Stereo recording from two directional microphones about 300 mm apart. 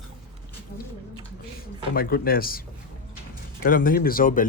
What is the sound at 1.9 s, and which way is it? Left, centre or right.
Speech, left.